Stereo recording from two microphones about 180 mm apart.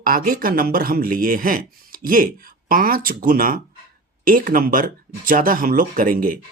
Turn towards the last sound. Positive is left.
turn(degrees=-50)  # may be behind; listen again after turning